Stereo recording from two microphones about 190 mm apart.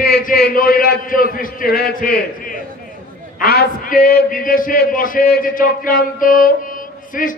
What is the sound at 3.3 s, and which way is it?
A man's voice, 50° left (ahead or behind).